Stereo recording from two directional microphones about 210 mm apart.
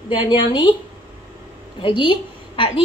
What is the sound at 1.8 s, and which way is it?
A woman's voice, 25° left (ahead or behind).